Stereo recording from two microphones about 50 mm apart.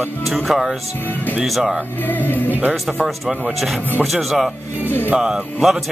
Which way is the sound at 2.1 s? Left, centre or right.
Left.